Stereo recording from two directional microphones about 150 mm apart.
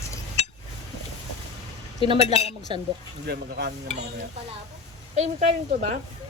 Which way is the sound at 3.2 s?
90° right.